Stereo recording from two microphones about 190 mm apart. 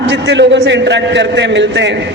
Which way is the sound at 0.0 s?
70° right (ahead or behind).